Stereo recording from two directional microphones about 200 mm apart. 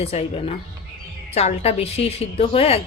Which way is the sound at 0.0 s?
30° left (ahead or behind).